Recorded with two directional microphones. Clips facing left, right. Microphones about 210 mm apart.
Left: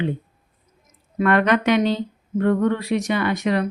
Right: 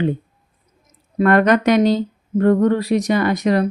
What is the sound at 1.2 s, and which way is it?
A woman's voice, 40° right (ahead or behind).